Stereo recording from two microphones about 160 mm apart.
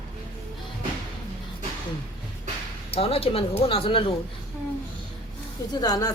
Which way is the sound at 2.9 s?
35° left (ahead or behind).